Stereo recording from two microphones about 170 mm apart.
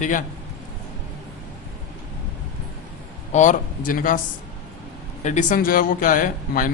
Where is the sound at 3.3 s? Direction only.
45° left (ahead or behind).